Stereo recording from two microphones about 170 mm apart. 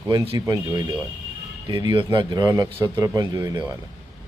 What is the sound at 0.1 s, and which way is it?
Speech, 25° right (ahead or behind).